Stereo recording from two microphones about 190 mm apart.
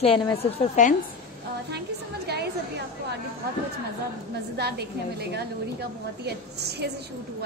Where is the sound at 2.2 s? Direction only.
60° right (ahead or behind).